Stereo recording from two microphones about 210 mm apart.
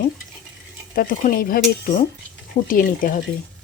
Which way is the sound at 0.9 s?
40° left (ahead or behind).